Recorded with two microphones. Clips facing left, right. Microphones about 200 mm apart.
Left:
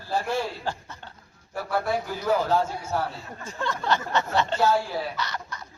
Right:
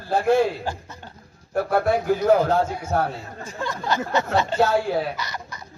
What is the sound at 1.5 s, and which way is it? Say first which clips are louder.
A man's voice: right 6 dB; 55° right (ahead or behind).